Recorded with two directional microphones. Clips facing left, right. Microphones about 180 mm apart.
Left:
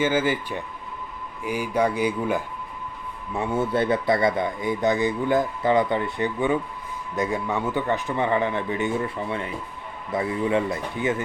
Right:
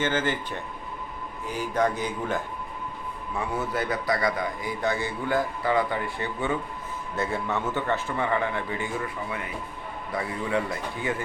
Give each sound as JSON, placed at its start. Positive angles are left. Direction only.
{"t": 0.0, "sound": "speech", "side_deg": 10}
{"t": 3.3, "sound": "a man's voice", "side_deg": 25}